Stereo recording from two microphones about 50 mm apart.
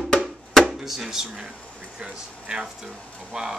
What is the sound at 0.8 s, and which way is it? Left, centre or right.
Speech, centre.